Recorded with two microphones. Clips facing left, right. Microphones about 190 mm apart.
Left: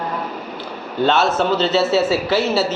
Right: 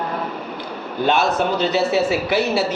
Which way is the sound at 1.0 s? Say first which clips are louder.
Left 2 dB; 15° right (ahead or behind).